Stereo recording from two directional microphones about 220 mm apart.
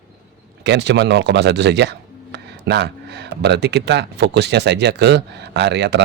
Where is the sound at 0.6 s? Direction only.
50° right (ahead or behind).